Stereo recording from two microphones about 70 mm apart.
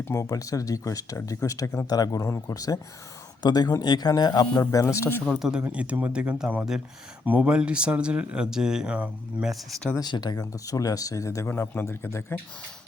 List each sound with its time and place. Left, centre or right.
0.1 s speech: left
1.9 s speech: left
2.2 s speech: left
3.4 s speech: left
4.7 s speech: left
5.4 s speech: centre
9.5 s speech: centre
10.0 s speech: left
11.4 s speech: left